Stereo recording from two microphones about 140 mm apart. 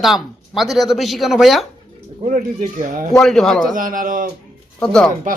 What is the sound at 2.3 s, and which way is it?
Speech, 75° right (ahead or behind).